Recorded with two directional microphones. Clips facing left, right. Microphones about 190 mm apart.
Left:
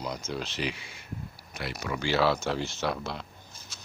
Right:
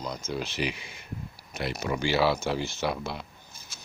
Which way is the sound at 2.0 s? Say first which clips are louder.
Even; 10° right (ahead or behind).